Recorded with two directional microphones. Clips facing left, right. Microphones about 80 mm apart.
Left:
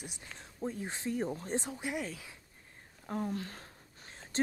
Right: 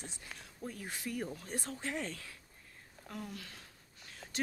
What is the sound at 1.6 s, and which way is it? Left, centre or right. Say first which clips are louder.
Speech: left 2 dB; centre.